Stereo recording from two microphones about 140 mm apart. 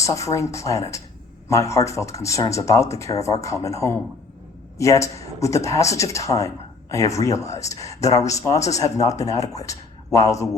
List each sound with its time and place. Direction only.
0.0 s speech: 20° left (ahead or behind)